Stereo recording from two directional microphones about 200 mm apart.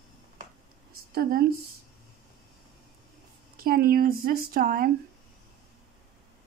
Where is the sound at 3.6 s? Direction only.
45° right (ahead or behind).